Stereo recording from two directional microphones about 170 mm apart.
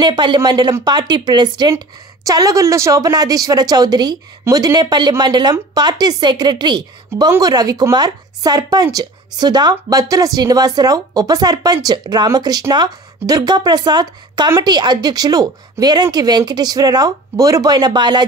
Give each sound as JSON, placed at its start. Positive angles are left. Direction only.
{"t": 0.0, "sound": "speech", "side_deg": -25}